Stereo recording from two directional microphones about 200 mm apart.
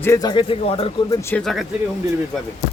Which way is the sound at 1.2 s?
10° left (ahead or behind).